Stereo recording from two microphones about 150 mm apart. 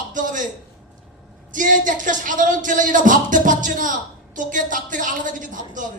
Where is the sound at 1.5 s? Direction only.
60° right (ahead or behind).